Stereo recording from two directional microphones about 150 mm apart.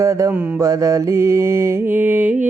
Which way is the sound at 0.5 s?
25° right (ahead or behind).